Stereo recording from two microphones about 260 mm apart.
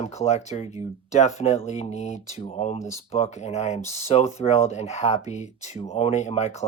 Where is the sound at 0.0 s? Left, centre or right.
Left.